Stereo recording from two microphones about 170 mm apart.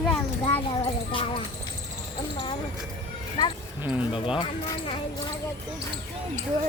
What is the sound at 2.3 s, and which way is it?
Speech, 30° left (ahead or behind).